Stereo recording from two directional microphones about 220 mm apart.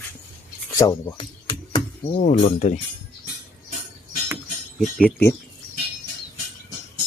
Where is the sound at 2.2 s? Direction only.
30° left (ahead or behind).